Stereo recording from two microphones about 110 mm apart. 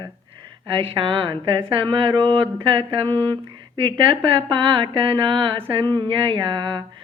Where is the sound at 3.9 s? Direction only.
50° right (ahead or behind).